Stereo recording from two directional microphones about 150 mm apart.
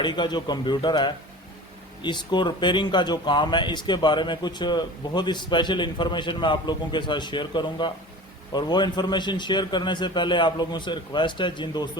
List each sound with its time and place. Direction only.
0.0 s a man's voice: 30° left (ahead or behind)